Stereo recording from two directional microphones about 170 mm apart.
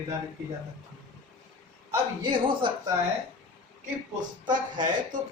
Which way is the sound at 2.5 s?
30° right (ahead or behind).